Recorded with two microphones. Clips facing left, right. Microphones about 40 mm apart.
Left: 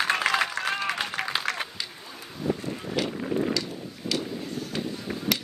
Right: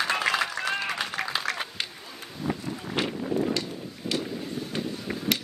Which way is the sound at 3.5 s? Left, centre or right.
Right.